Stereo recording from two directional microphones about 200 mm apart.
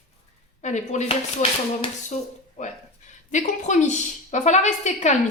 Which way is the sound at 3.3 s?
40° left (ahead or behind).